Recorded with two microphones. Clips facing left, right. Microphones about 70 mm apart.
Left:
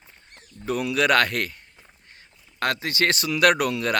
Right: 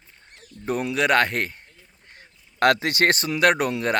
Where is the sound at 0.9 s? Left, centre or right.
Right.